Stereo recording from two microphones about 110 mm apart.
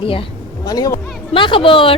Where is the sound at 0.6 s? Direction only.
35° left (ahead or behind).